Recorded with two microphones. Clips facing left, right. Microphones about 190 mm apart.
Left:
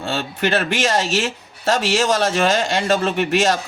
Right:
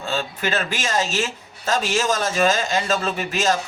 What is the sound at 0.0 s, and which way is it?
A man's voice, 70° left (ahead or behind).